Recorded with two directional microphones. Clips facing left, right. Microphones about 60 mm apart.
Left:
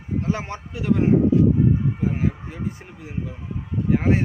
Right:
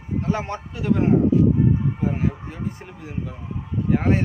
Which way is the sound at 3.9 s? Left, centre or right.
Centre.